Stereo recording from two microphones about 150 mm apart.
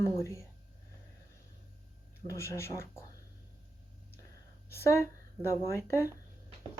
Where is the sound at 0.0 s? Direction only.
20° left (ahead or behind).